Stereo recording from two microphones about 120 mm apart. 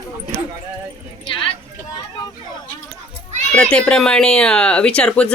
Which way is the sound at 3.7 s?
5° left (ahead or behind).